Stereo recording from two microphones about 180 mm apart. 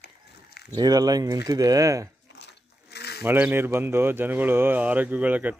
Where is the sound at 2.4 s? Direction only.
70° left (ahead or behind).